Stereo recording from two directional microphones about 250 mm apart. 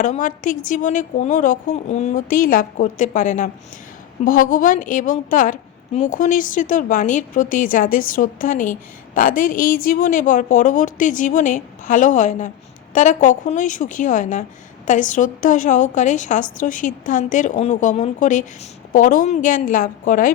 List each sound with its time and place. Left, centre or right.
0.0 s a woman's voice: left